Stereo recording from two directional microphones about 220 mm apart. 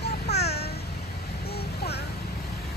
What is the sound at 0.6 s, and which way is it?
Vehicle, 45° left (ahead or behind).